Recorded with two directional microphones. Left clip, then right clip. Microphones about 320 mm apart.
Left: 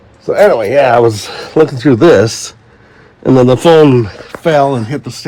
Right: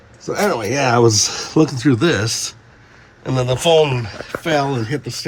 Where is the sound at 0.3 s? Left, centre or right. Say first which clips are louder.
Left 11 dB; centre.